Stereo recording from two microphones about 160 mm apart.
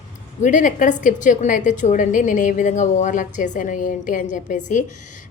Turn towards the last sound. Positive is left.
turn(degrees=50)  # may be behind; listen again after turning